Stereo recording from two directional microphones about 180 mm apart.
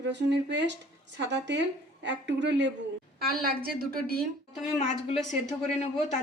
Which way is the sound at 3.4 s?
55° right (ahead or behind).